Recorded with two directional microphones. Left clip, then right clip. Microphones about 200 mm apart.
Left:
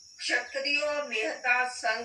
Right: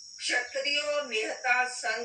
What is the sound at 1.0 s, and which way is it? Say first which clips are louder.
Speech: even; 15° left (ahead or behind).